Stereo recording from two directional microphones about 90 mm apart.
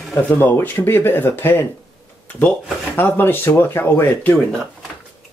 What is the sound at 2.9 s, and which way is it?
Speech, 25° left (ahead or behind).